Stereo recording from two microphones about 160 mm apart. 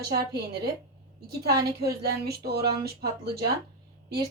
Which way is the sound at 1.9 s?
80° right.